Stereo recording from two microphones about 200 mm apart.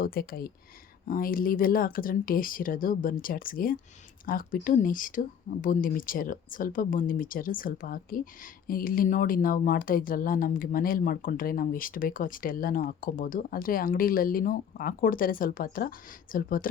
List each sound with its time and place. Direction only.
0.0 s speech: 45° left (ahead or behind)